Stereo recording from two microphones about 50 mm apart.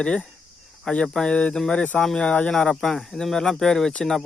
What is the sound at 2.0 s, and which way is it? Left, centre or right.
Speech, centre.